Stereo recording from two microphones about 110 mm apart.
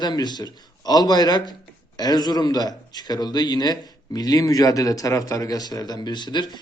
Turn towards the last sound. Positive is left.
turn(degrees=45)  # may be behind; listen again after turning